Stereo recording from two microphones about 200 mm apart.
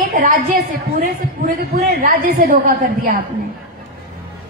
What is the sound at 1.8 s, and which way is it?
A woman's voice, 45° right (ahead or behind).